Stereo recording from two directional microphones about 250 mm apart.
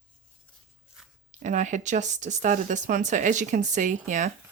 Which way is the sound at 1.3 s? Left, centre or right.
Right.